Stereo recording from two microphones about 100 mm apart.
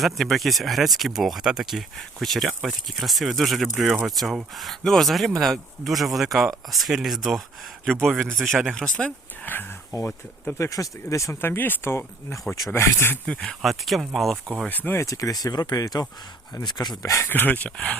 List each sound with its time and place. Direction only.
0.0 s speech: centre (ahead or behind); by 9.6 s 15° left (ahead or behind)
9.9 s speech: 40° left (ahead or behind)
13.2 s speech: 10° left (ahead or behind)
14.7 s speech: 20° left (ahead or behind)
15.0 s speech: 35° left (ahead or behind)
17.0 s speech: 30° left (ahead or behind)
17.2 s speech: 20° left (ahead or behind)